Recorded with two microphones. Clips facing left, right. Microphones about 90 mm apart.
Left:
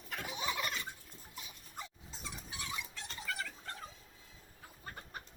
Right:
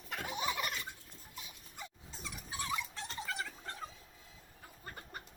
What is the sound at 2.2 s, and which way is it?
Dog, 25° left (ahead or behind).